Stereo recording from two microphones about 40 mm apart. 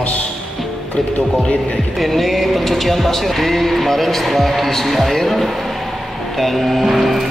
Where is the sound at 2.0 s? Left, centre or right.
Centre.